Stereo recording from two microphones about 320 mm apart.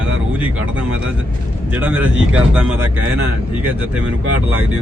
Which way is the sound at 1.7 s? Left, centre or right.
Centre.